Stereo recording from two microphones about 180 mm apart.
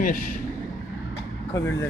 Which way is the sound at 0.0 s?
50° left (ahead or behind).